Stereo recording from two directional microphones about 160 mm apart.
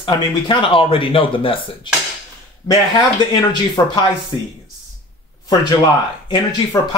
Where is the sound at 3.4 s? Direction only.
25° left (ahead or behind).